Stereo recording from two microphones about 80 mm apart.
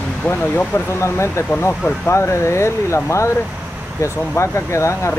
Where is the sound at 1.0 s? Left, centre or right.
Left.